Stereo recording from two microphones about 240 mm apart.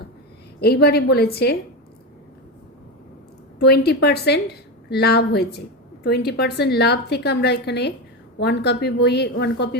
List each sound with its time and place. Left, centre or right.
0.6 s a woman's voice: left
3.6 s a woman's voice: left